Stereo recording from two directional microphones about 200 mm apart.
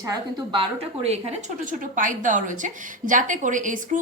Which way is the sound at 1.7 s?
40° right (ahead or behind).